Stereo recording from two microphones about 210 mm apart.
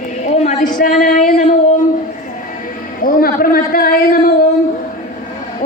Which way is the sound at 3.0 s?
45° left (ahead or behind).